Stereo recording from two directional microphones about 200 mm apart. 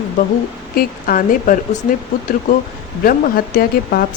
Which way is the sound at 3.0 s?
45° left (ahead or behind).